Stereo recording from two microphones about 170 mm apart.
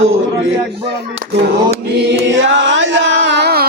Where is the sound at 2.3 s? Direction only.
90° right; by 3.7 s 70° right (ahead or behind).